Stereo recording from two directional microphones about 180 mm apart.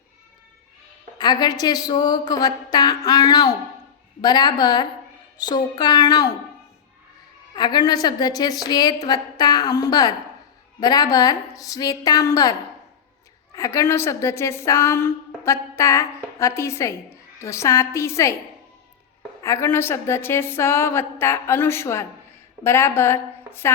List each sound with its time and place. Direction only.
1.2 s speech: 25° left (ahead or behind)
7.5 s speech: 25° left (ahead or behind)
13.6 s a woman's voice: 15° left (ahead or behind)
19.4 s a woman's voice: 15° left (ahead or behind)